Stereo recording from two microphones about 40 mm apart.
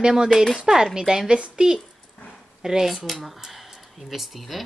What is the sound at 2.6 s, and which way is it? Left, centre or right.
Speech, centre.